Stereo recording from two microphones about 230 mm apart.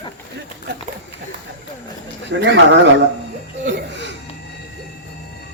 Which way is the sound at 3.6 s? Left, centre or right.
Right.